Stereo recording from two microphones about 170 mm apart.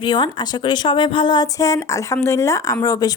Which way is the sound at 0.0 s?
25° left (ahead or behind).